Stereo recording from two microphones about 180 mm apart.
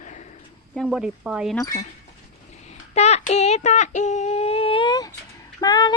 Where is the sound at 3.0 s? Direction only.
40° left (ahead or behind); by 5.9 s 20° left (ahead or behind).